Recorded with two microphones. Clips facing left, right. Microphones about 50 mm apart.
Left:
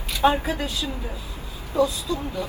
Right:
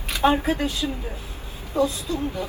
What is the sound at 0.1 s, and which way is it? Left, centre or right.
Speech, right.